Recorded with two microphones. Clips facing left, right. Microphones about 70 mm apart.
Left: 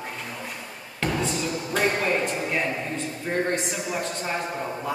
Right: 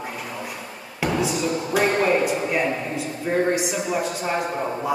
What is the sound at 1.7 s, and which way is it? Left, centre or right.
Speech, centre.